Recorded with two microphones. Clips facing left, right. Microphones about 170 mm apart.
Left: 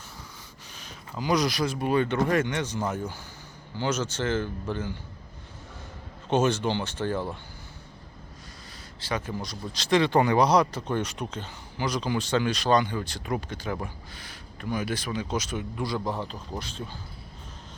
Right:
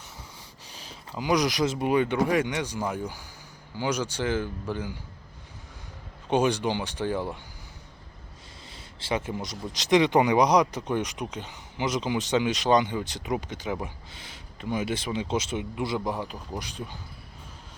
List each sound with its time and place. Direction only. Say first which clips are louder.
1.1 s speech: right 1 dB; 15° right (ahead or behind)
6.3 s speech: even; 15° right (ahead or behind)
9.0 s speech: right 2 dB; 25° right (ahead or behind)